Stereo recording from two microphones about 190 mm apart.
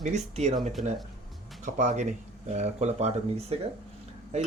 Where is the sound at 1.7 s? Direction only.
40° right (ahead or behind).